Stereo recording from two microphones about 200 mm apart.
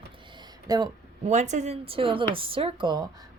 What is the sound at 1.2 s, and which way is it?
Speech, 35° right (ahead or behind).